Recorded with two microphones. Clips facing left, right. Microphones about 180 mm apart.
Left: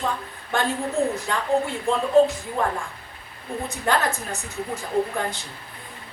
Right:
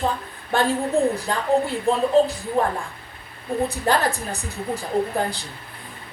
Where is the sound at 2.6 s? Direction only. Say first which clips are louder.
Right 3 dB; 35° right (ahead or behind).